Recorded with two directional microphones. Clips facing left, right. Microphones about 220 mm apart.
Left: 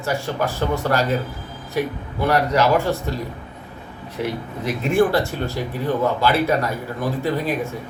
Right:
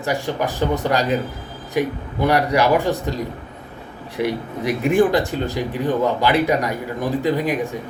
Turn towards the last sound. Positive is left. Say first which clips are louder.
# right 2 dB
turn(degrees=-15)  # may be behind; listen again after turning